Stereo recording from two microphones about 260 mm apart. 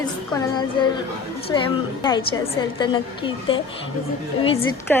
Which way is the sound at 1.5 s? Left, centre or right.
Centre.